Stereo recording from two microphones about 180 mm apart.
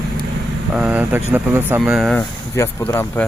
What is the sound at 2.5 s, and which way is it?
Speech, 15° left (ahead or behind).